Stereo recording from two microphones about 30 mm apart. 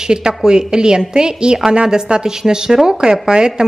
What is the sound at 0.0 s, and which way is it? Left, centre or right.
A woman's voice, right.